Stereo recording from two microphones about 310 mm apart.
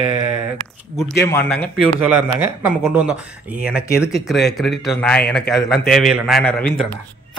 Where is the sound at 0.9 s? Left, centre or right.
Centre.